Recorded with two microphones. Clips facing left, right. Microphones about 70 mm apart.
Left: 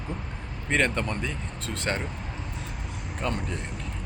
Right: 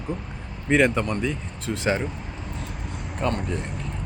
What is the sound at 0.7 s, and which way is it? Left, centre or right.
Speech, centre.